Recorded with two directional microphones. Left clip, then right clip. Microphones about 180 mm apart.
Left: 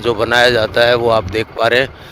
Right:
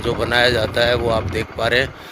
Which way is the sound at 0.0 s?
45° left (ahead or behind).